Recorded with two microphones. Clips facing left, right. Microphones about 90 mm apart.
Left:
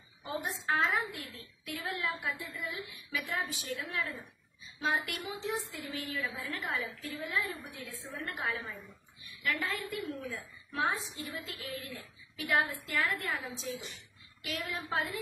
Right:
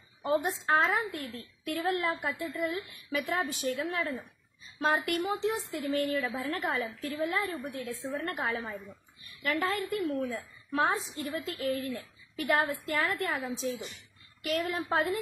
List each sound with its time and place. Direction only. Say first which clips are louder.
0.2 s a woman's voice: right 9 dB; 55° right (ahead or behind)